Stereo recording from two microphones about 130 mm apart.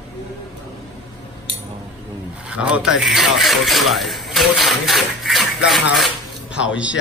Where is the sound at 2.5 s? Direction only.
10° right (ahead or behind).